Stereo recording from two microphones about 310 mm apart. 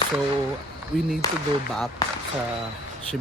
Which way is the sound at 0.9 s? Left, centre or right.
Left.